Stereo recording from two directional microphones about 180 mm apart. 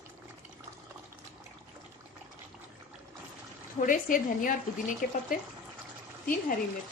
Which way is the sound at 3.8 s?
50° left (ahead or behind).